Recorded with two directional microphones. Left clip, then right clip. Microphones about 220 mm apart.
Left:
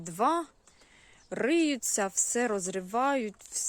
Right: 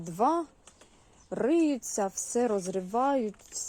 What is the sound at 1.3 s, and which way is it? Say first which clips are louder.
Speech: right 1 dB; 40° left (ahead or behind).